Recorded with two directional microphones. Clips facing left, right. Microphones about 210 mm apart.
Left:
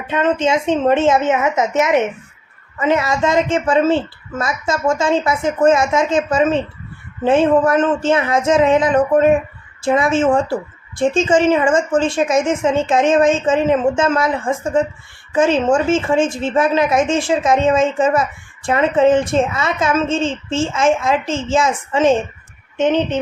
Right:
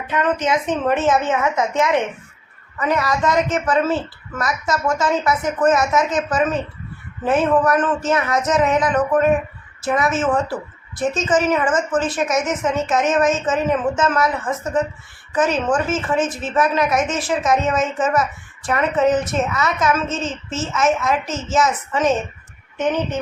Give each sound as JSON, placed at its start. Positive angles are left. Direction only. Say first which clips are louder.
{"t": 0.1, "sound": "a woman's voice", "louder": "left 3 dB", "side_deg": 25}